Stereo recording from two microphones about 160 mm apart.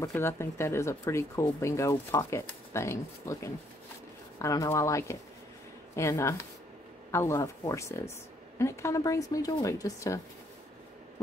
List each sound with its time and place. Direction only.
0.0 s a woman's voice: 15° left (ahead or behind)